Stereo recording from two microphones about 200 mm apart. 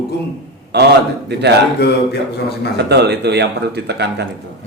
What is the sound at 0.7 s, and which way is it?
Speech, 55° right (ahead or behind).